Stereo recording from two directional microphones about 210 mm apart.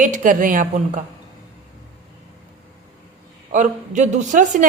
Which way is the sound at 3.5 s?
35° right (ahead or behind).